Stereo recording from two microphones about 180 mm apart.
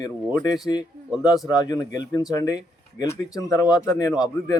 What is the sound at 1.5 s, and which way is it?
Speech, 20° left (ahead or behind).